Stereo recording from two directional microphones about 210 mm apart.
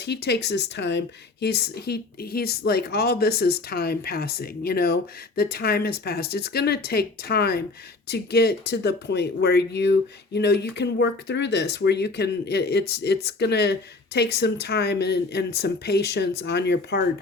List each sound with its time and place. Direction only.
0.0 s speech: 50° left (ahead or behind)